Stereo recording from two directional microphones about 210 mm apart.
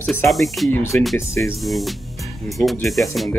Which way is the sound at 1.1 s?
15° left (ahead or behind).